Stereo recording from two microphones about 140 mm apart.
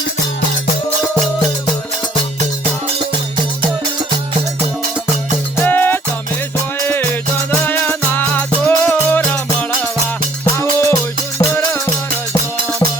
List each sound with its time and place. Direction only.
5.6 s music: 15° left (ahead or behind)